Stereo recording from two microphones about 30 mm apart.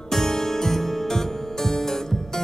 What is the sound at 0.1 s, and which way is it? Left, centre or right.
Music, centre.